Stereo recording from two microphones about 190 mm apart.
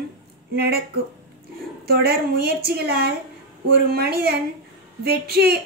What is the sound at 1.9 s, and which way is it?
A woman's voice, 55° right (ahead or behind).